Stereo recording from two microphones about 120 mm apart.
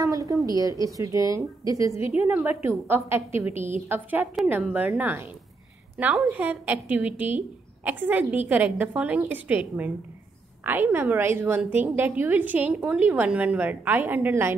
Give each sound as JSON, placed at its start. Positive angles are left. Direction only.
{"t": 0.0, "sound": "a woman's voice", "side_deg": -25}
{"t": 2.0, "sound": "a woman's voice", "side_deg": 55}
{"t": 2.2, "sound": "a woman's voice", "side_deg": -15}
{"t": 6.3, "sound": "a woman's voice", "side_deg": -15}